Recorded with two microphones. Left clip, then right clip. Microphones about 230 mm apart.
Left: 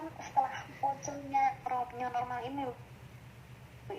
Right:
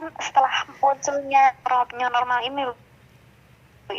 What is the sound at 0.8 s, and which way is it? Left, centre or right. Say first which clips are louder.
Speech: right 14 dB; right.